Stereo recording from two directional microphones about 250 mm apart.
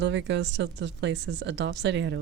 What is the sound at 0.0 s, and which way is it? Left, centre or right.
Speech, right.